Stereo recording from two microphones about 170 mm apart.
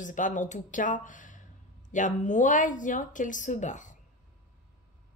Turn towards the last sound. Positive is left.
turn(degrees=45)  # may be behind; listen again after turning